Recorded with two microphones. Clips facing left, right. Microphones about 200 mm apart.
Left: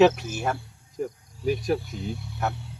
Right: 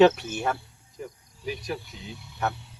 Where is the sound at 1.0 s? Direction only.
50° left (ahead or behind).